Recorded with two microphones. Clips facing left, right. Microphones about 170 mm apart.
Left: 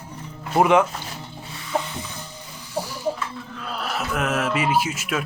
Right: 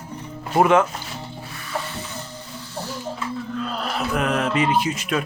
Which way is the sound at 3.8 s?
5° left (ahead or behind).